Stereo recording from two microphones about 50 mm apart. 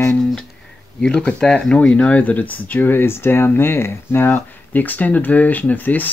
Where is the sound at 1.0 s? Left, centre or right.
Centre; by 6.1 s left.